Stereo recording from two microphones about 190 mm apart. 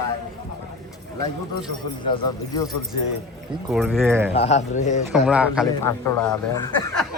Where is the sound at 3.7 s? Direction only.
Centre (ahead or behind).